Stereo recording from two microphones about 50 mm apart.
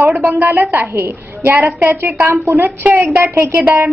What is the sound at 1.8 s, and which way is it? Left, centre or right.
Speech, right.